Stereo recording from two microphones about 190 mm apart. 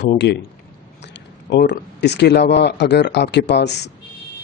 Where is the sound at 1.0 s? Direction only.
65° left (ahead or behind).